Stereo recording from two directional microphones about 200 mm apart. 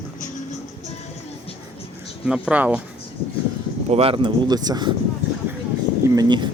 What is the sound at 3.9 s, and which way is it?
Speech, 30° right (ahead or behind).